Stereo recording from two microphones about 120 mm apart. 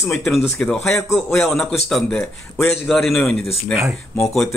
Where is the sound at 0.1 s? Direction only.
Centre (ahead or behind).